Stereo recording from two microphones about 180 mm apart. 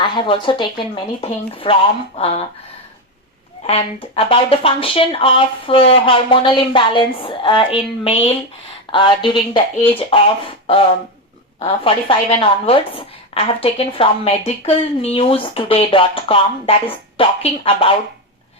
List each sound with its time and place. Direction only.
0.0 s a woman's voice: 25° left (ahead or behind)
3.6 s a woman's voice: 30° left (ahead or behind)